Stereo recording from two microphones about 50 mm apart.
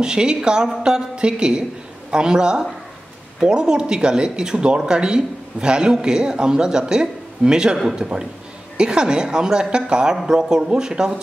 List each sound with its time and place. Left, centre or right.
0.0 s speech: centre